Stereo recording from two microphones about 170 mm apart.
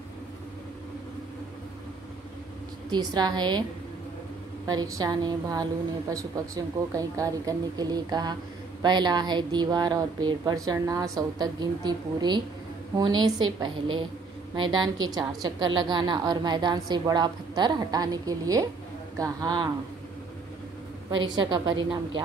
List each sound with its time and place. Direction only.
2.9 s a woman's voice: 25° right (ahead or behind)
4.6 s a woman's voice: 20° right (ahead or behind)
21.1 s a woman's voice: 25° right (ahead or behind)